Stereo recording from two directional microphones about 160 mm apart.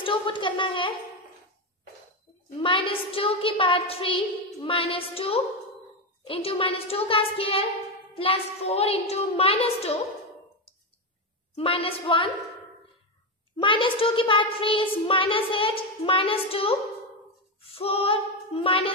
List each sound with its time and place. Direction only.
0.0 s a child's voice: 30° left (ahead or behind)
2.6 s a child's voice: 35° left (ahead or behind)
11.5 s a child's voice: 35° left (ahead or behind)
13.6 s a child's voice: 30° left (ahead or behind)
17.7 s a child's voice: 35° left (ahead or behind)